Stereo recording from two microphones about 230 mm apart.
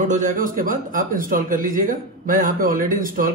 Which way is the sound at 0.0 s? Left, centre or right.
Right.